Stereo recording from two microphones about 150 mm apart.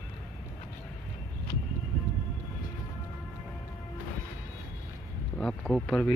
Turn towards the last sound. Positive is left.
turn(degrees=5)  # may be behind; listen again after turning